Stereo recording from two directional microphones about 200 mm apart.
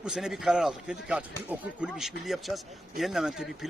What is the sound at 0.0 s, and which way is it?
Speech, centre (ahead or behind).